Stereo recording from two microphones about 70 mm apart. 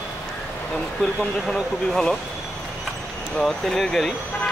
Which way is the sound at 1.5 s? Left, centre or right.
Centre.